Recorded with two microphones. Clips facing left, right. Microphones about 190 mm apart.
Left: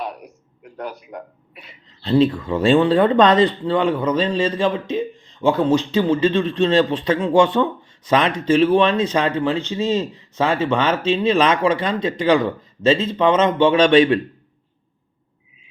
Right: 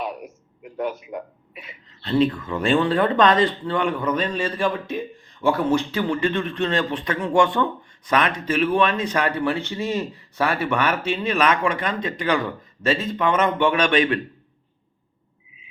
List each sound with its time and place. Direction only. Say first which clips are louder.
0.0 s a man's voice: even; centre (ahead or behind)
2.0 s a man's voice: left 4 dB; 25° left (ahead or behind)